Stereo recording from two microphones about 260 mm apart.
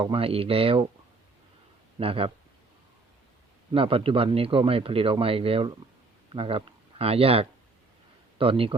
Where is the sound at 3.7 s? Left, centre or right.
Right.